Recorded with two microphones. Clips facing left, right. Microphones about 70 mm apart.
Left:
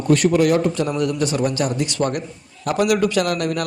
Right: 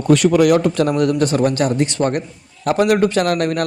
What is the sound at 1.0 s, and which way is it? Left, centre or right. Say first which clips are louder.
A man's voice: right 4 dB; right.